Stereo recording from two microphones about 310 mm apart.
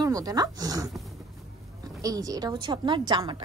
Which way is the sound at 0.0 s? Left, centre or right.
Centre.